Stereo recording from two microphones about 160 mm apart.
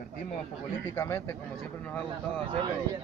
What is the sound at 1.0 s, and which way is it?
Speech, 15° left (ahead or behind).